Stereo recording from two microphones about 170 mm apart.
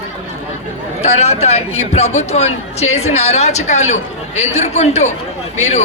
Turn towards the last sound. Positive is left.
turn(degrees=40)  # may be behind; listen again after turning